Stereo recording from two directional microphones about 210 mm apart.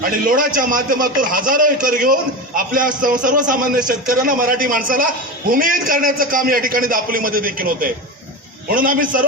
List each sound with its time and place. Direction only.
0.0 s a man's voice: 40° right (ahead or behind)